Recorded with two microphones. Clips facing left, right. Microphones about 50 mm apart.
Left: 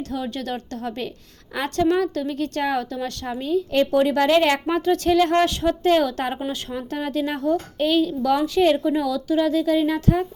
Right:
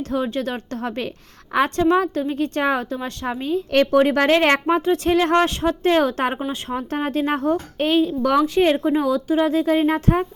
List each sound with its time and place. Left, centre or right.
0.0 s a woman's voice: right
3.7 s speech: right
4.6 s a woman's voice: right
8.2 s speech: right
8.5 s a woman's voice: right